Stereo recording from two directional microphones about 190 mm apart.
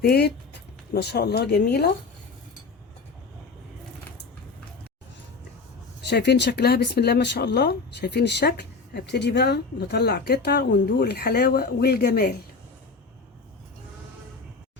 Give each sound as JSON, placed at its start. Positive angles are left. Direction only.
{"t": 0.0, "sound": "speech", "side_deg": 60}
{"t": 6.1, "sound": "speech", "side_deg": 65}